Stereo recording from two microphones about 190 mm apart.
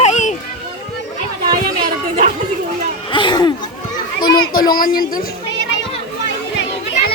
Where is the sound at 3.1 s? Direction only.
25° left (ahead or behind).